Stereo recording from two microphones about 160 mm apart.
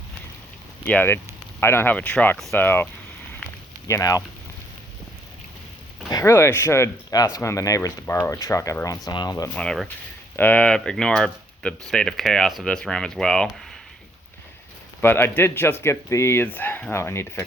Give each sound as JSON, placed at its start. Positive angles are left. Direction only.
{"t": 0.9, "sound": "speech", "side_deg": 10}
{"t": 6.1, "sound": "speech", "side_deg": 20}
{"t": 9.6, "sound": "speech", "side_deg": 5}
{"t": 15.0, "sound": "speech", "side_deg": 15}